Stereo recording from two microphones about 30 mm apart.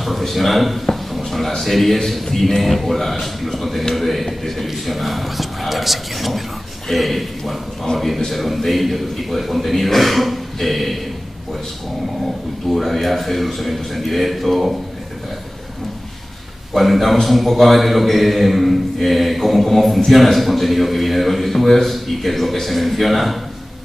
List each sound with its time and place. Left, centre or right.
0.0 s a man's voice: centre
1.1 s a sound: centre
1.6 s a man's voice: centre
7.9 s a man's voice: left
8.3 s a man's voice: centre
12.7 s a man's voice: centre
16.7 s a man's voice: centre